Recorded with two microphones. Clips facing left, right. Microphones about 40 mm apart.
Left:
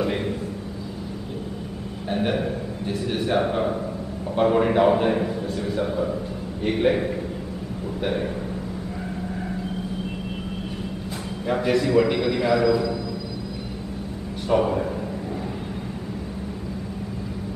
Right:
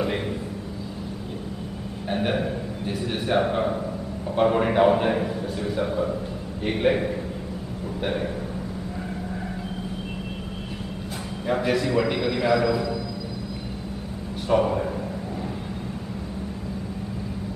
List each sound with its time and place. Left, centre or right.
2.0 s a sound: centre
3.0 s a man's voice: centre
11.4 s a man's voice: centre
14.5 s a man's voice: centre